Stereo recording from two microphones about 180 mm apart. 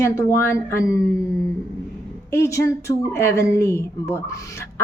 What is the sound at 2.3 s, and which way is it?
Speech, 15° left (ahead or behind).